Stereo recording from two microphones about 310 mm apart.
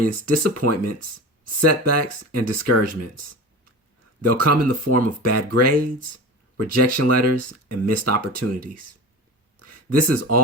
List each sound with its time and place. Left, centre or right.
0.3 s speech: right
4.2 s speech: right